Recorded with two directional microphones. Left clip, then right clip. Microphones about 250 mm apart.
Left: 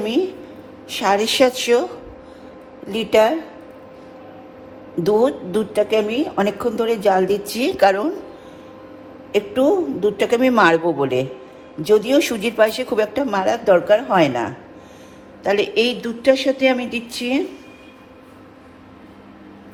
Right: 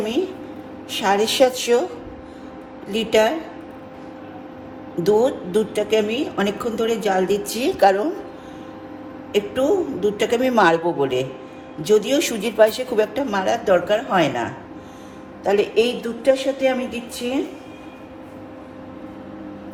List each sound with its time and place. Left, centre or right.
0.9 s speech: left
2.9 s speech: centre
5.2 s speech: centre
9.3 s speech: centre